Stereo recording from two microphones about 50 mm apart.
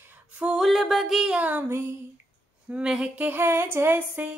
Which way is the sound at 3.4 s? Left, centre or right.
Right.